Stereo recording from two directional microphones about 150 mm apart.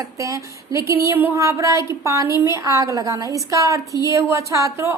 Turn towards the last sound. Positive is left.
turn(degrees=-20)  # may be behind; listen again after turning